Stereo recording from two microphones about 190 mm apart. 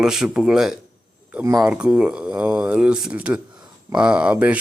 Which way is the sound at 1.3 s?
15° right (ahead or behind).